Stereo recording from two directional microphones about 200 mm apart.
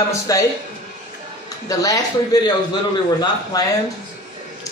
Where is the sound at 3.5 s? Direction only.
20° left (ahead or behind).